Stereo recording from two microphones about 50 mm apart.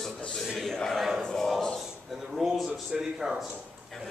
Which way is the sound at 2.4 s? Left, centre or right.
Centre.